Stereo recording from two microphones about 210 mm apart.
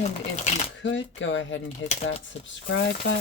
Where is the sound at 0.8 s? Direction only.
65° left (ahead or behind).